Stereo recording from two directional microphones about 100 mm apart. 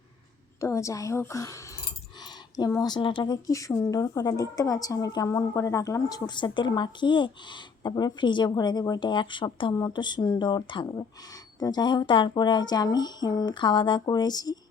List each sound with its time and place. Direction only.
0.6 s a woman's voice: 30° left (ahead or behind)
2.8 s a woman's voice: 45° left (ahead or behind)